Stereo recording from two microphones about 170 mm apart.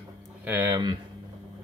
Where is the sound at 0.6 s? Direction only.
25° right (ahead or behind).